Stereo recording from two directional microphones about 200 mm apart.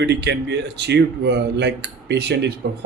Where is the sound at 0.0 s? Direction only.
60° right (ahead or behind).